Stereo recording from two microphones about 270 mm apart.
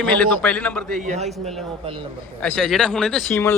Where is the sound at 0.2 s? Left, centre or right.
Centre.